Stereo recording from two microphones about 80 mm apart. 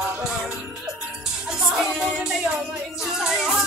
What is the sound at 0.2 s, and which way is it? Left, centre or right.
Music, centre.